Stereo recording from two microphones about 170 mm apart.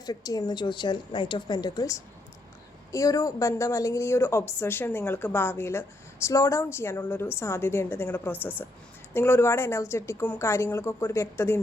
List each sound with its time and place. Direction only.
0.0 s a woman's voice: 20° left (ahead or behind)